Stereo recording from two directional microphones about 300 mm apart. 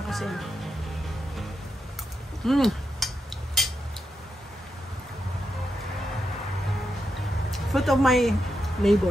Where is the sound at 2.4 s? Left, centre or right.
Centre.